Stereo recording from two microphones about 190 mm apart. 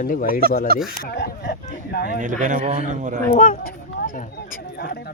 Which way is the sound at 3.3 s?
45° left (ahead or behind).